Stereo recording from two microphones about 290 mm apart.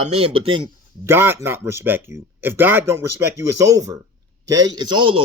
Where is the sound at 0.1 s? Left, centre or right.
Centre.